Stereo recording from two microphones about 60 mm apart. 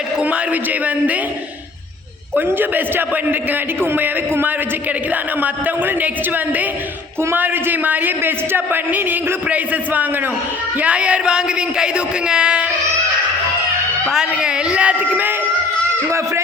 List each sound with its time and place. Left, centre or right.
0.2 s a man's voice: right
2.3 s a woman's voice: right; by 12.6 s centre
14.1 s a woman's voice: centre
16.0 s speech: right